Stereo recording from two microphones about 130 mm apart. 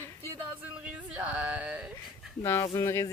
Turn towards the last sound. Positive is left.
turn(degrees=25)  # may be behind; listen again after turning